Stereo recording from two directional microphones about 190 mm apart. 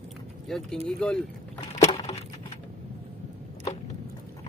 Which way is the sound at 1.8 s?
25° left (ahead or behind).